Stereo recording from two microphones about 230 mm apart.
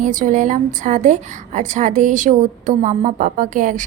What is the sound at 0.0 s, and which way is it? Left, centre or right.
A woman's voice, right.